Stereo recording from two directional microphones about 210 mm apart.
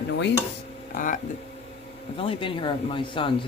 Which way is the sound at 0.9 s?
40° left (ahead or behind).